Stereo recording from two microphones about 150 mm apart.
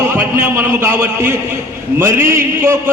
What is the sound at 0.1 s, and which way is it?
A man's voice, 15° right (ahead or behind).